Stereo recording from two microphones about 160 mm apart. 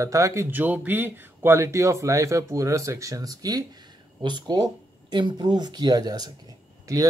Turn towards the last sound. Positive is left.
turn(degrees=-20)  # may be behind; listen again after turning